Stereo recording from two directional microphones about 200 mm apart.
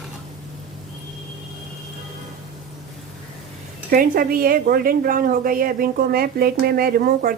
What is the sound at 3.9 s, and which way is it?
A woman's voice, 45° right (ahead or behind).